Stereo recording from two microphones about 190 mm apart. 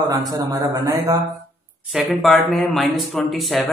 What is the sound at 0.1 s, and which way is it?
A man's voice, 20° right (ahead or behind).